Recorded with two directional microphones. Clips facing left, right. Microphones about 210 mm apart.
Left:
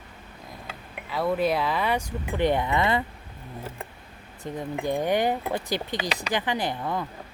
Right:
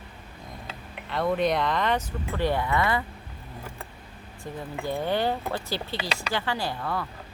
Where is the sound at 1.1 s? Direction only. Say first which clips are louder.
Even; 5° left (ahead or behind); by 3.0 s 20° left (ahead or behind).